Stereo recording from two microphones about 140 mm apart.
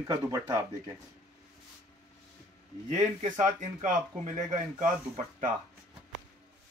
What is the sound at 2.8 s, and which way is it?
Speech, 55° right (ahead or behind).